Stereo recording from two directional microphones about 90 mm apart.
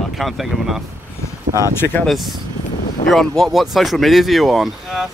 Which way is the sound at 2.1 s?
Centre (ahead or behind).